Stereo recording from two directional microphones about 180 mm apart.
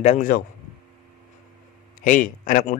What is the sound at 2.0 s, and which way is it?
Speech, 45° left (ahead or behind).